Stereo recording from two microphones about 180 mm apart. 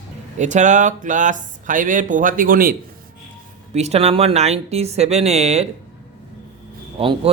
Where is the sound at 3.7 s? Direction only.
35° right (ahead or behind).